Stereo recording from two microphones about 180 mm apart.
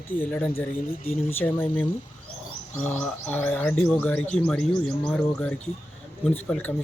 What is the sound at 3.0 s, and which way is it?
Speech, 5° left (ahead or behind).